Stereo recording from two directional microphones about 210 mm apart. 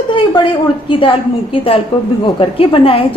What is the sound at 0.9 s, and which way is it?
Speech, 25° left (ahead or behind).